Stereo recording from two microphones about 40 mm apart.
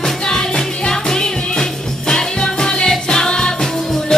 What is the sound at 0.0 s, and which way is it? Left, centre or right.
Music, centre.